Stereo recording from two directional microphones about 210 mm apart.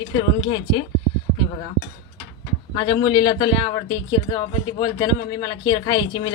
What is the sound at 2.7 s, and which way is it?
Speech, 25° left (ahead or behind).